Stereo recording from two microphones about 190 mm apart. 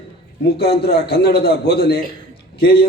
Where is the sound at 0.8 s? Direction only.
55° left (ahead or behind).